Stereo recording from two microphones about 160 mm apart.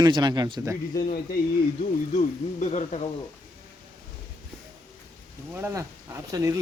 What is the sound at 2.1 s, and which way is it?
Speech, 50° left (ahead or behind).